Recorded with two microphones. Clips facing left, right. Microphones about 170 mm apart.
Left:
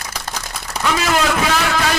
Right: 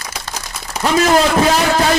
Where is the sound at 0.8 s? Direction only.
35° right (ahead or behind).